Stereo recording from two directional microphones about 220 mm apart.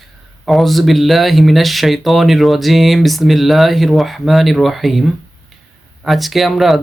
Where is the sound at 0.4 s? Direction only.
Centre (ahead or behind).